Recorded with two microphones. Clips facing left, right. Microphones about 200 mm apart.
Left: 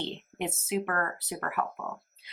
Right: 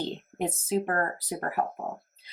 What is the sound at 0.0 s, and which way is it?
Speech, 40° right (ahead or behind).